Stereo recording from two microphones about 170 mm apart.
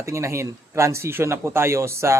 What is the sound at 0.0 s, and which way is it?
Speech, 15° right (ahead or behind).